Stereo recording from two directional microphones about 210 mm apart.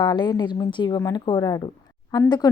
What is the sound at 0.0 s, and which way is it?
A woman's voice, 20° left (ahead or behind).